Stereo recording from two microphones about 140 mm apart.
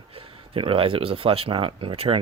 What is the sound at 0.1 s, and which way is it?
Speech, 40° right (ahead or behind).